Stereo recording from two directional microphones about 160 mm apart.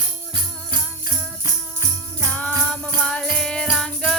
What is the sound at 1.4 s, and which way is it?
Jingle bell, 20° right (ahead or behind).